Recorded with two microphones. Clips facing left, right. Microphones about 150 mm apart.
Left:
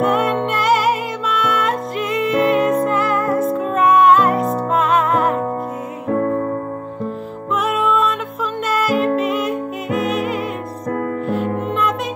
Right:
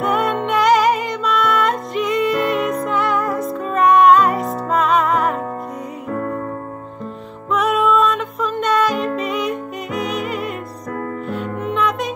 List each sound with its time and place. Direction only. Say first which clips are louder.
0.0 s music: left 2 dB; centre (ahead or behind)
6.1 s music: left 6 dB; 35° left (ahead or behind)
7.5 s music: right 2 dB; centre (ahead or behind)